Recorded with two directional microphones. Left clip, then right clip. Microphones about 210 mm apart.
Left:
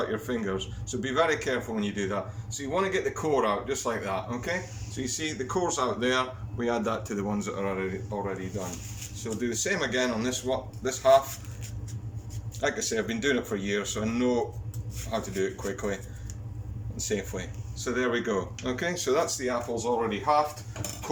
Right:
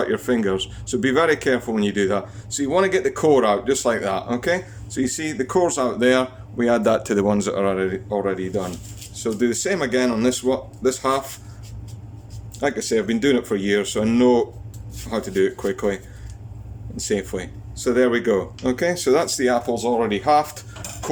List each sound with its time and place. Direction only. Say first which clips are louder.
0.0 s speech: right 9 dB; 45° right (ahead or behind)
12.5 s speech: right 7 dB; 35° right (ahead or behind)
17.0 s speech: right 8 dB; 40° right (ahead or behind)